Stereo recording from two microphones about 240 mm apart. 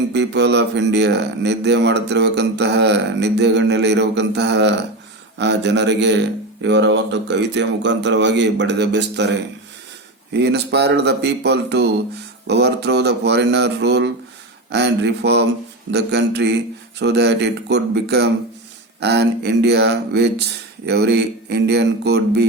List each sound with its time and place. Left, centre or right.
0.1 s speech: right